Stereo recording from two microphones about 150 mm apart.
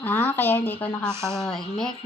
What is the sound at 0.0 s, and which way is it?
Speech, 10° left (ahead or behind).